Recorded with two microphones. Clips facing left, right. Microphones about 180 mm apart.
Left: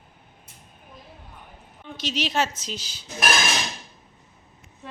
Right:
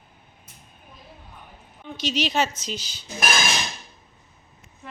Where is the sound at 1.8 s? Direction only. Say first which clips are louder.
Right 3 dB; centre (ahead or behind).